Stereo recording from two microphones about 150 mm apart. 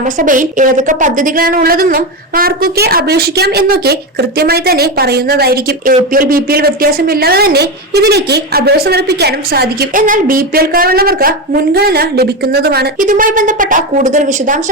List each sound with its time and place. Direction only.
0.0 s a woman's voice: 60° right (ahead or behind)